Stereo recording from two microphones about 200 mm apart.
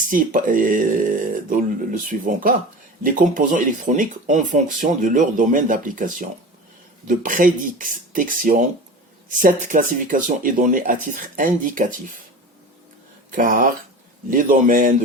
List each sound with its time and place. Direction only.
0.1 s speech: 40° right (ahead or behind)
13.3 s speech: 45° right (ahead or behind)